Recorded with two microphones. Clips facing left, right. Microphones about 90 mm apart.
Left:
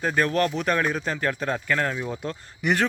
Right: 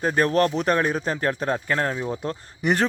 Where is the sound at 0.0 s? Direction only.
35° right (ahead or behind).